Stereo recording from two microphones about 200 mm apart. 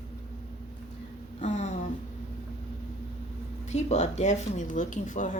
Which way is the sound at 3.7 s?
35° left (ahead or behind).